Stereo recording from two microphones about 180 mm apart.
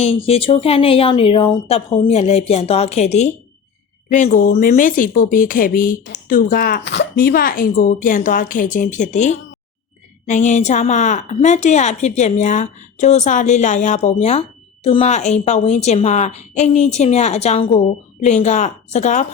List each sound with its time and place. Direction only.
0.2 s a woman's voice: 30° left (ahead or behind)